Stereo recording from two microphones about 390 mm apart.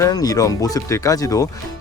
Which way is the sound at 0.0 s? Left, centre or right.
Centre.